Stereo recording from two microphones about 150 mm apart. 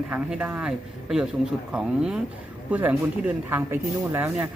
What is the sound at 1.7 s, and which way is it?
Speech, 5° right (ahead or behind).